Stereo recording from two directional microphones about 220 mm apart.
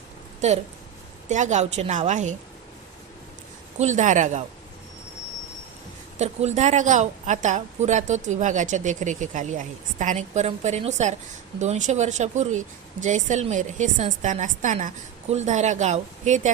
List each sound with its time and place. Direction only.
1.3 s a woman's voice: 35° right (ahead or behind)
3.8 s a woman's voice: 30° right (ahead or behind)
6.1 s a woman's voice: 30° right (ahead or behind)